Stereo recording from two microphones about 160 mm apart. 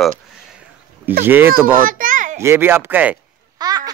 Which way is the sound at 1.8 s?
55° right (ahead or behind).